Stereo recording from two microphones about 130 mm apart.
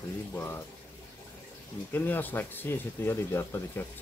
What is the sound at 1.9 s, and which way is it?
Speech, 15° left (ahead or behind).